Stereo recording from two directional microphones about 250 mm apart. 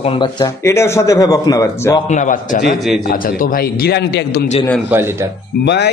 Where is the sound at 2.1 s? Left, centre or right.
Left.